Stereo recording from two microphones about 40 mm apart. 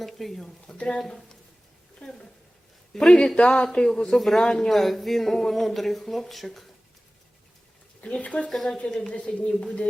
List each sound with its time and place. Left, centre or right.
0.0 s speech: centre
0.8 s speech: left
1.0 s speech: centre
2.0 s speech: left
2.9 s speech: centre
4.7 s speech: centre
8.0 s speech: left
8.4 s speech: centre
9.1 s speech: left